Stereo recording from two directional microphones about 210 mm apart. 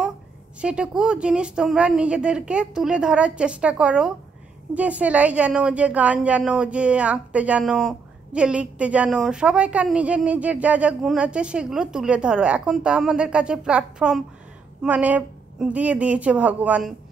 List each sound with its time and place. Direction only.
0.6 s a woman's voice: 5° right (ahead or behind)